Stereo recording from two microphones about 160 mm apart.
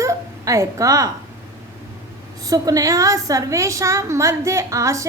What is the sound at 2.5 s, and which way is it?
A woman's voice, 20° right (ahead or behind).